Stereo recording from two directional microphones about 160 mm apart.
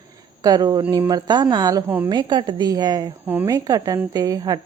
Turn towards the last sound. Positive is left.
turn(degrees=-25)  # may be behind; listen again after turning